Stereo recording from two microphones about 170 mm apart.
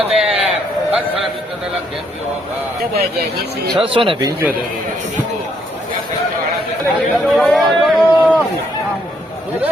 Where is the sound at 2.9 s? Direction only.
65° right (ahead or behind).